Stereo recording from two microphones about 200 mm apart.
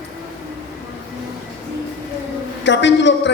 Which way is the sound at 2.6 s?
65° left (ahead or behind).